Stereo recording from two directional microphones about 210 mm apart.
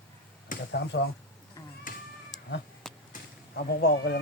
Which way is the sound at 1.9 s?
40° left (ahead or behind).